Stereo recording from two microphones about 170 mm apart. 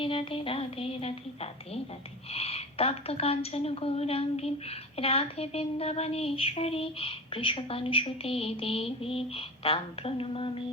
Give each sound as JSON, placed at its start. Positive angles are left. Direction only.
{"t": 0.0, "sound": "a woman's voice", "side_deg": 30}